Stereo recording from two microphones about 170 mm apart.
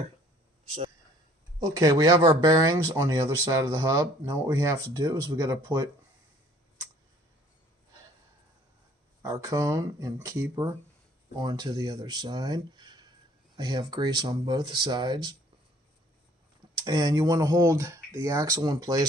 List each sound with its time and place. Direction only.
1.7 s speech: 20° right (ahead or behind)
9.2 s speech: 20° right (ahead or behind)
11.3 s speech: 25° right (ahead or behind)
16.8 s speech: 25° right (ahead or behind)